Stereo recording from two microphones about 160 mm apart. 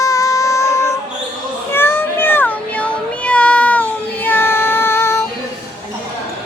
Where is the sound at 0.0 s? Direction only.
20° left (ahead or behind).